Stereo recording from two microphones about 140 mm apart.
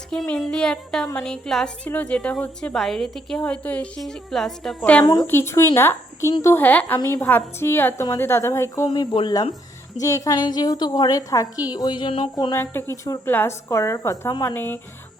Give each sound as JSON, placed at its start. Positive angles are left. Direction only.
{"t": 0.1, "sound": "a woman's voice", "side_deg": 5}
{"t": 5.2, "sound": "speech", "side_deg": 15}
{"t": 8.9, "sound": "a woman's voice", "side_deg": 35}
{"t": 12.5, "sound": "a woman's voice", "side_deg": 20}